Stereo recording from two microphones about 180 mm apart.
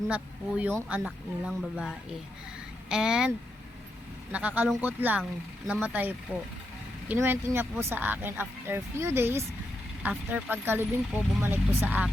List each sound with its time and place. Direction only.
0.1 s speech: 5° right (ahead or behind)
2.9 s speech: 5° right (ahead or behind)